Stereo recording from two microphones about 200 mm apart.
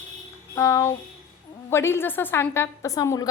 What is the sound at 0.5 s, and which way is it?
A woman's voice, 15° left (ahead or behind).